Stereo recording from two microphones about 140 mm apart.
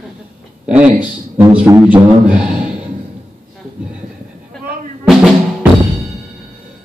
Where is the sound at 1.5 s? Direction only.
15° right (ahead or behind).